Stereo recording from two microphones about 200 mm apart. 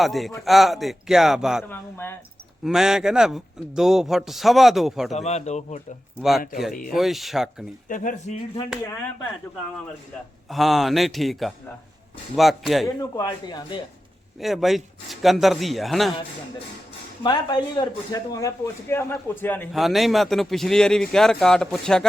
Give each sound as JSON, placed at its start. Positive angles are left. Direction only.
{"t": 0.0, "sound": "a man's voice", "side_deg": 0}
{"t": 1.6, "sound": "a man's voice", "side_deg": 10}
{"t": 2.6, "sound": "a man's voice", "side_deg": -5}
{"t": 5.1, "sound": "speech", "side_deg": 35}
{"t": 6.9, "sound": "a man's voice", "side_deg": 0}
{"t": 7.9, "sound": "speech", "side_deg": 40}
{"t": 10.5, "sound": "a man's voice", "side_deg": 0}
{"t": 13.0, "sound": "speech", "side_deg": 20}
{"t": 14.3, "sound": "a man's voice", "side_deg": 0}
{"t": 17.2, "sound": "a man's voice", "side_deg": 20}